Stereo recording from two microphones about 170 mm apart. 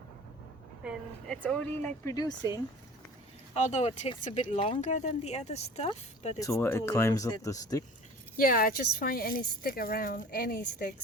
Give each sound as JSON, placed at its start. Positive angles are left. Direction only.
{"t": 0.9, "sound": "speech", "side_deg": 5}
{"t": 3.5, "sound": "speech", "side_deg": 40}
{"t": 6.4, "sound": "speech", "side_deg": 15}
{"t": 8.4, "sound": "speech", "side_deg": 55}